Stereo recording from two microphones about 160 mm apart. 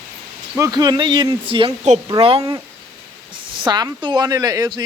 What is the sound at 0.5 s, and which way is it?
A woman's voice, 20° right (ahead or behind).